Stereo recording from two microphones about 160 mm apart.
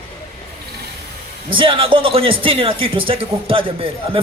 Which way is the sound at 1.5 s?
35° right (ahead or behind).